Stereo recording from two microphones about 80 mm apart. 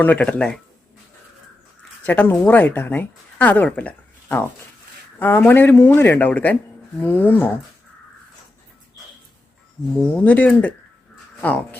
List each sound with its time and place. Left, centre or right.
0.0 s speech: centre
2.0 s speech: left
10.0 s speech: centre